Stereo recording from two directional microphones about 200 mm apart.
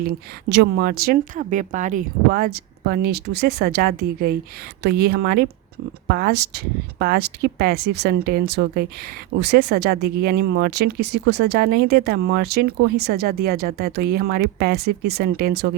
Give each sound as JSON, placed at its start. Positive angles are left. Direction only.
{"t": 0.4, "sound": "speech", "side_deg": -55}